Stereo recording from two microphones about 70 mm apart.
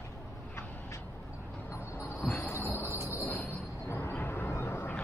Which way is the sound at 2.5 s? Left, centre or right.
Left.